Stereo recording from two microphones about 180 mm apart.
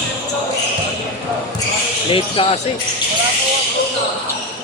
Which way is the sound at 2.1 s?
30° left (ahead or behind).